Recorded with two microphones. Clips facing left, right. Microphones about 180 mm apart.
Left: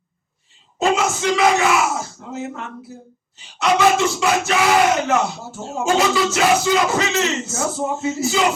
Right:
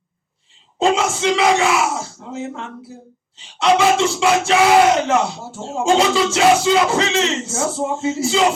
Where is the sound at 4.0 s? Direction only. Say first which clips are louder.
Right 2 dB; 25° right (ahead or behind).